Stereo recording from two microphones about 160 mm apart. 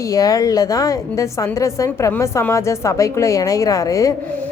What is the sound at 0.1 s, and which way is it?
A woman's voice, 20° left (ahead or behind).